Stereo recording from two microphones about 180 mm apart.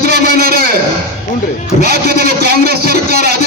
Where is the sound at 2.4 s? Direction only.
60° right (ahead or behind).